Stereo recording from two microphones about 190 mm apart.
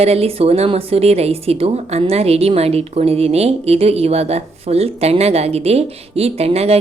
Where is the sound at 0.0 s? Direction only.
30° right (ahead or behind).